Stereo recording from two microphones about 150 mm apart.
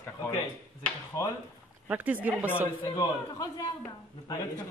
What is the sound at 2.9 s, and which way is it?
A man's voice, 20° left (ahead or behind).